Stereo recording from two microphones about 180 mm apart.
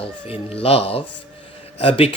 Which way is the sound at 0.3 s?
30° left (ahead or behind).